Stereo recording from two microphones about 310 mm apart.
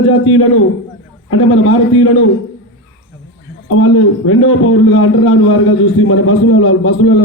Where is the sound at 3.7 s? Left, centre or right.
Left.